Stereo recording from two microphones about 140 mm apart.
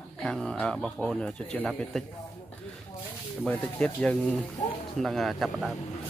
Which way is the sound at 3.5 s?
10° left (ahead or behind).